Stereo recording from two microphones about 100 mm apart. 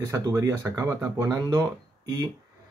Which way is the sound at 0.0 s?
30° right (ahead or behind).